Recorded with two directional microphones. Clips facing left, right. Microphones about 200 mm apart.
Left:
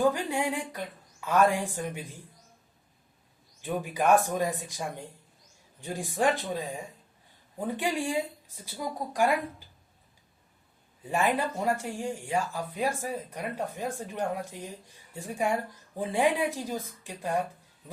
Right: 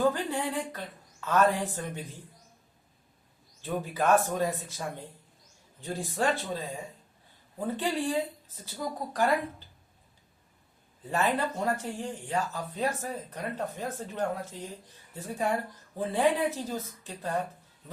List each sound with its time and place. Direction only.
0.1 s speech: 10° left (ahead or behind)
3.6 s speech: 15° left (ahead or behind)
5.8 s speech: 15° left (ahead or behind)
7.8 s speech: 10° left (ahead or behind)
11.0 s a woman's voice: 10° left (ahead or behind)